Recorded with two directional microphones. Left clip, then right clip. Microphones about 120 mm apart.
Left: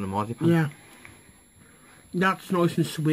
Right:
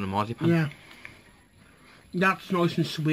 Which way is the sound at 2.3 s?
10° left (ahead or behind).